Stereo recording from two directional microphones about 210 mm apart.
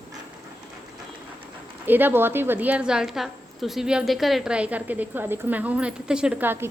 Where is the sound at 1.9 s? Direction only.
10° right (ahead or behind).